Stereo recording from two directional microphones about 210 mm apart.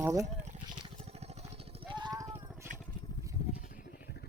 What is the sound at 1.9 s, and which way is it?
Vehicle, 20° right (ahead or behind).